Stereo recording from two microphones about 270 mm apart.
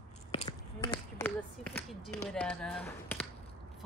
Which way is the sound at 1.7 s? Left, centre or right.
Centre.